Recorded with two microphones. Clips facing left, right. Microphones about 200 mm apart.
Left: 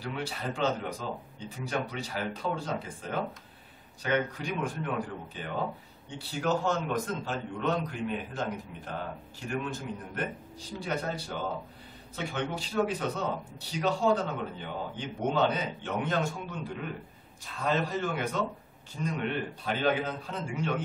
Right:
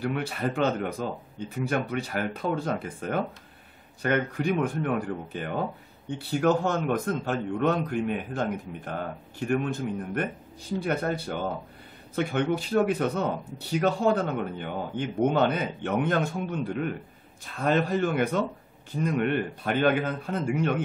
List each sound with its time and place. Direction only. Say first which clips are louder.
0.0 s a man's voice: right 7 dB; 55° right (ahead or behind)